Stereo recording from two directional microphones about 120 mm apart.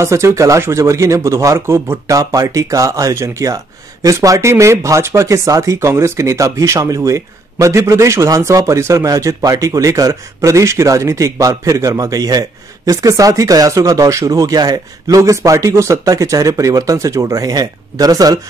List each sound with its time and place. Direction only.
0.0 s speech: 25° right (ahead or behind)